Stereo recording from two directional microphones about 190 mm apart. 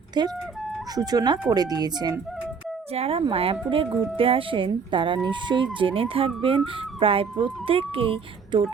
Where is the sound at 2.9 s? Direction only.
30° right (ahead or behind).